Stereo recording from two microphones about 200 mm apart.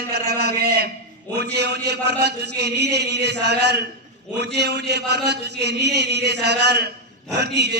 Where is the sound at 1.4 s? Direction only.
55° right (ahead or behind).